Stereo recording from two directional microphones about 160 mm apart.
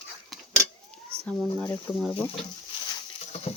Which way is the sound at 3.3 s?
45° left (ahead or behind).